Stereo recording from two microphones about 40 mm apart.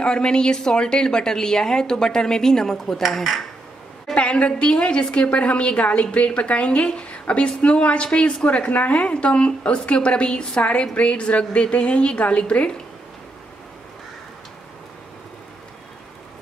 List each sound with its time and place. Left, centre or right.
0.0 s a woman's voice: left
4.1 s a woman's voice: left
8.9 s a woman's voice: left